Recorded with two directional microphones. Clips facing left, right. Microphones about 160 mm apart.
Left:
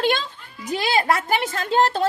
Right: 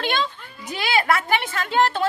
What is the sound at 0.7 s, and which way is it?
Speech, 40° left (ahead or behind).